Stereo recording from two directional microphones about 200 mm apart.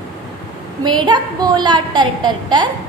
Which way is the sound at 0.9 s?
20° right (ahead or behind).